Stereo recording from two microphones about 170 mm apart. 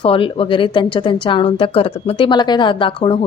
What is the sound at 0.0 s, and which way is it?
Speech, 30° left (ahead or behind).